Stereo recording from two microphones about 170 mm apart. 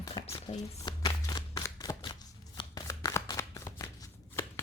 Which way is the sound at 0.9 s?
25° left (ahead or behind).